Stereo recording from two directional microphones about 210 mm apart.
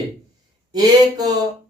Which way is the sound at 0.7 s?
20° right (ahead or behind).